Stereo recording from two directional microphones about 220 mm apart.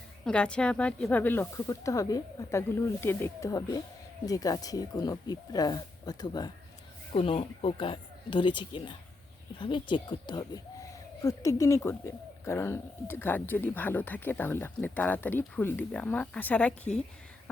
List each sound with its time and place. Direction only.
0.3 s speech: 5° left (ahead or behind)